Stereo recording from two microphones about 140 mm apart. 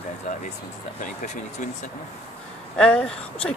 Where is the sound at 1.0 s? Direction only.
60° left (ahead or behind).